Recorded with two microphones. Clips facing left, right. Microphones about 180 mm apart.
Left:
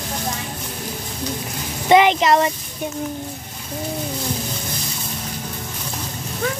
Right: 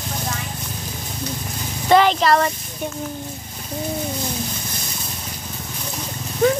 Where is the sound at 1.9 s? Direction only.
15° left (ahead or behind).